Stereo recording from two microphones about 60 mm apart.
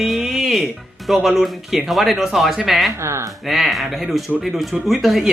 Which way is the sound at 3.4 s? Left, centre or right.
Centre.